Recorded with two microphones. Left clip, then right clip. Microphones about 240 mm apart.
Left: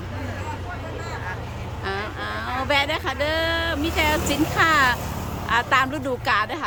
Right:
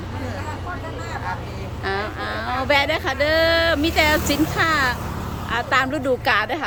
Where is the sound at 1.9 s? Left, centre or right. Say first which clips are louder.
Right 3 dB; centre.